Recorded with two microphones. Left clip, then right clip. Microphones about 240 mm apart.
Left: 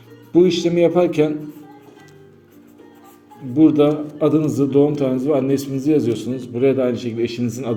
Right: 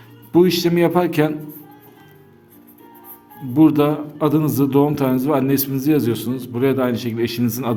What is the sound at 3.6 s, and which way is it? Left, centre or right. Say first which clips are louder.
A man's voice: left 1 dB; right.